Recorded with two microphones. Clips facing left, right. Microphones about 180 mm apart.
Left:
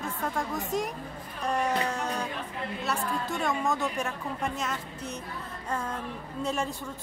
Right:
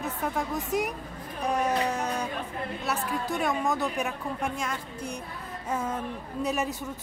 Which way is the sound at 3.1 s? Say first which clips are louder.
Right 2 dB; 15° right (ahead or behind).